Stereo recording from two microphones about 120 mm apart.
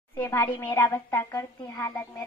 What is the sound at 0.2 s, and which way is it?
A woman's voice, 15° left (ahead or behind).